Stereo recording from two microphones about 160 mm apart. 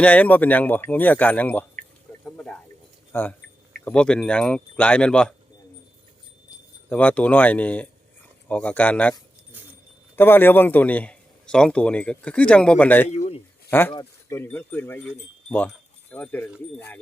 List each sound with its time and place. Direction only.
0.0 s a man's voice: 10° left (ahead or behind)
2.2 s a sound: 5° left (ahead or behind)
3.1 s a man's voice: 10° left (ahead or behind)
6.9 s a man's voice: 10° left (ahead or behind)
10.2 s a man's voice: 15° left (ahead or behind)
13.1 s a man's voice: 45° left (ahead or behind)
13.7 s a man's voice: 15° left (ahead or behind)